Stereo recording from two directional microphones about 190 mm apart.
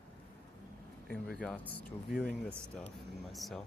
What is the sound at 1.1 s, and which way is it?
Speech, 5° left (ahead or behind).